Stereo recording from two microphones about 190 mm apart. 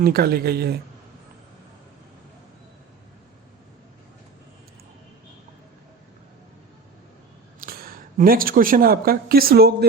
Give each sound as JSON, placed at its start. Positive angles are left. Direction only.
{"t": 0.0, "sound": "a woman's voice", "side_deg": -55}
{"t": 7.6, "sound": "speech", "side_deg": -50}